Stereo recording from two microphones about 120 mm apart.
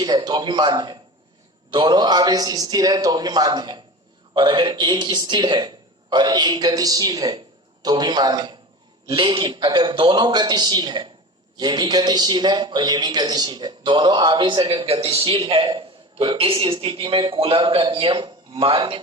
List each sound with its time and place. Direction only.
0.0 s a man's voice: 35° right (ahead or behind); by 15.4 s 50° right (ahead or behind)
15.4 s a man's voice: 40° right (ahead or behind)